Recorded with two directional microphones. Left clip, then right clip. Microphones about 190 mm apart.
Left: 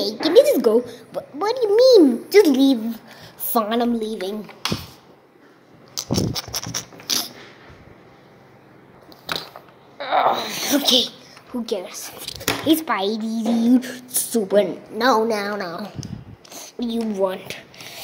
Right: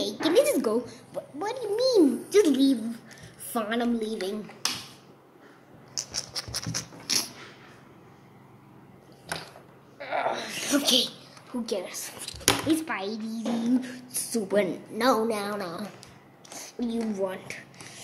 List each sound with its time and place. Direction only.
0.0 s a woman's voice: 5° left (ahead or behind)
5.9 s a sound: 15° left (ahead or behind)
9.9 s sneeze: 25° left (ahead or behind); by 11.1 s 10° left (ahead or behind)
11.5 s a child's voice: 10° left (ahead or behind)
14.7 s a woman's voice: centre (ahead or behind)
16.8 s speech: 10° left (ahead or behind)